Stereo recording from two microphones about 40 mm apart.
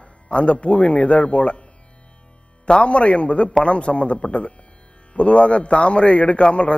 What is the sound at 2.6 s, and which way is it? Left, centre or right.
Speech, left.